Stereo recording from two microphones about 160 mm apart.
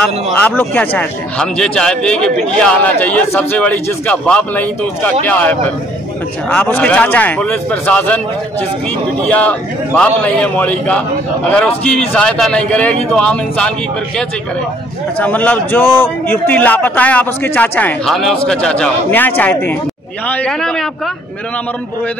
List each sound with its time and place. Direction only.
0.0 s speech: 10° left (ahead or behind)
9.3 s speech: 10° left (ahead or behind)